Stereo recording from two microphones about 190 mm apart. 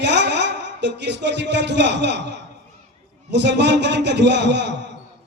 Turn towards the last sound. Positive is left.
turn(degrees=-65)  # may be behind; listen again after turning